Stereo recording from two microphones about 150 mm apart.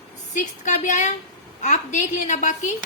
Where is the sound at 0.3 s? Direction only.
55° left (ahead or behind).